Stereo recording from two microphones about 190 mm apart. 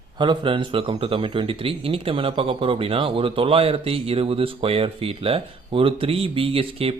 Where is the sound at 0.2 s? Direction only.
25° right (ahead or behind).